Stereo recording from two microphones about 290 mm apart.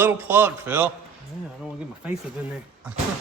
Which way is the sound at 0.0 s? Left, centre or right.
Centre.